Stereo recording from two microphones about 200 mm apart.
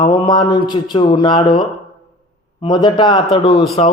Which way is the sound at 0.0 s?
25° left (ahead or behind).